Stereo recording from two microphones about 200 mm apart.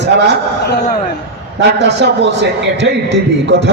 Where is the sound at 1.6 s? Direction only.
60° right (ahead or behind).